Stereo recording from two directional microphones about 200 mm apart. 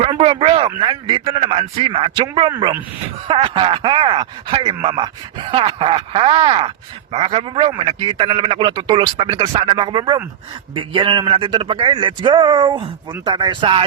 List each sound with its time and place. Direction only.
0.0 s speech: 25° right (ahead or behind)